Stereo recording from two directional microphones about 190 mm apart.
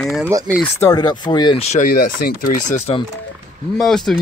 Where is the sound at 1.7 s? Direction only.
45° left (ahead or behind).